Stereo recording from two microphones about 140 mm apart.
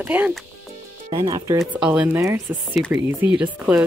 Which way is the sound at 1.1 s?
35° right (ahead or behind).